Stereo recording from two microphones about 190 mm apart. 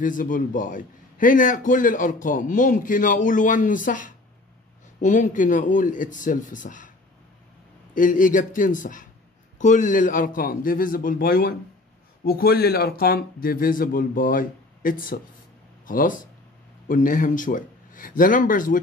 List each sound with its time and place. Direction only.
0.0 s a man's voice: 45° left (ahead or behind)
7.9 s a man's voice: 45° left (ahead or behind)